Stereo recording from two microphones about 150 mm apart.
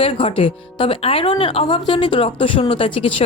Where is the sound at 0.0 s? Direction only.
35° left (ahead or behind).